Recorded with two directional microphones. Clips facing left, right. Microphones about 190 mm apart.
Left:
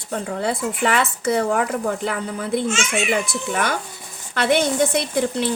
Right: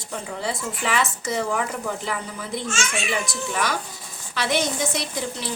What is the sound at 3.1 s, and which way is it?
A woman's voice, 55° left (ahead or behind).